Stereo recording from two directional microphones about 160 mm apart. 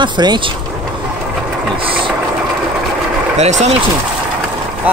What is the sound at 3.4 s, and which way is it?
Speech, 45° right (ahead or behind).